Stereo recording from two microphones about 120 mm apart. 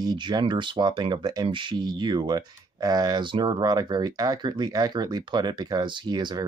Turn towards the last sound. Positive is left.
turn(degrees=-40)  # may be behind; listen again after turning